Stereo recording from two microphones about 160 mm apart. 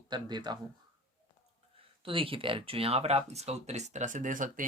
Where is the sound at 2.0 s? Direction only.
35° right (ahead or behind).